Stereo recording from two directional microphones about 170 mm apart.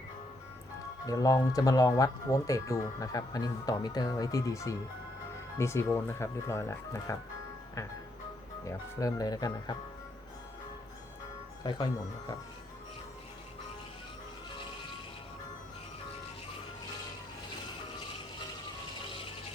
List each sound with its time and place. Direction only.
1.0 s speech: 20° left (ahead or behind)
8.6 s speech: 20° left (ahead or behind)
11.6 s speech: 25° left (ahead or behind)